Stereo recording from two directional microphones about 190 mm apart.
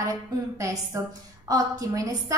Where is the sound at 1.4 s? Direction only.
20° right (ahead or behind).